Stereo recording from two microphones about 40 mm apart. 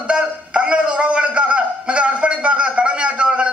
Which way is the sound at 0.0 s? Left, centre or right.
Right.